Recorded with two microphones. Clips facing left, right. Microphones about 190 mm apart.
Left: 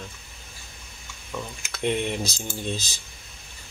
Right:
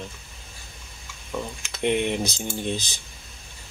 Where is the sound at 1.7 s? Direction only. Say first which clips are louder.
Right 2 dB; 20° right (ahead or behind).